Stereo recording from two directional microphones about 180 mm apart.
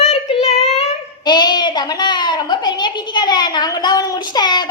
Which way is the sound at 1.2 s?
25° left (ahead or behind).